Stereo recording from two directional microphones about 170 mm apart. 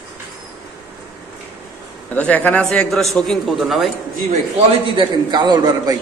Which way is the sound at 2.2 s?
10° left (ahead or behind).